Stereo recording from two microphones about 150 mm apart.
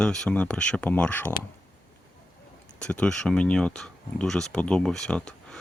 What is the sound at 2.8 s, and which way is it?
Speech, 5° left (ahead or behind).